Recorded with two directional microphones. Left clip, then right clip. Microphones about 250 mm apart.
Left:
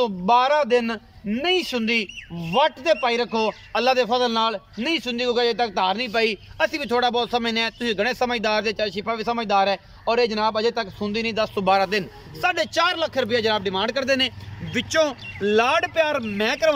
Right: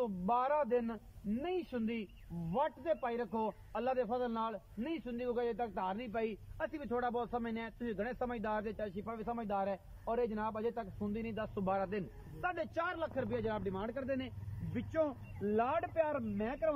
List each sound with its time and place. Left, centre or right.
0.3 s a man's voice: centre; by 16.7 s left